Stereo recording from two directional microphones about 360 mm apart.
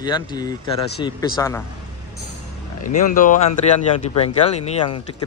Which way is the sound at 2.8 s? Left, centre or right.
Left.